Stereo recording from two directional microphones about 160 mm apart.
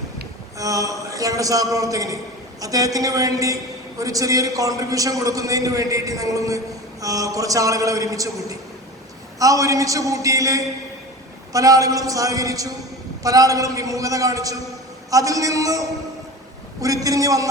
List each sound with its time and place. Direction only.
0.6 s a man's voice: 20° right (ahead or behind)